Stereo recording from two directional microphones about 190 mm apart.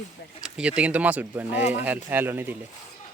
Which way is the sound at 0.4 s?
5° right (ahead or behind).